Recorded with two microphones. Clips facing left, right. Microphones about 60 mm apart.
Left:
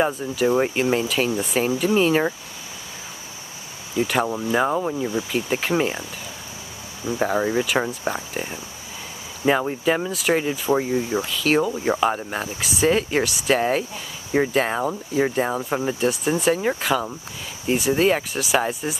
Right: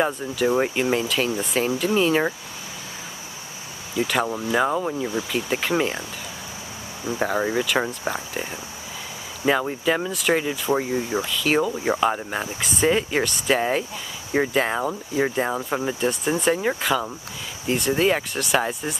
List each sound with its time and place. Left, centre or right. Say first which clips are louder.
0.0 s speech: left 1 dB; centre
4.1 s speech: left 1 dB; centre
7.1 s speech: left 2 dB; centre
9.7 s speech: left 1 dB; centre